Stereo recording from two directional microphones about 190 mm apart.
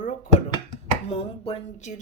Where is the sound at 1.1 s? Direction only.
30° left (ahead or behind).